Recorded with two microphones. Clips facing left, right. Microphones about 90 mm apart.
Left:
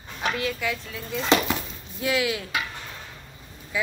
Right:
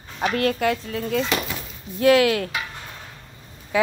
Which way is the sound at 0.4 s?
55° right (ahead or behind).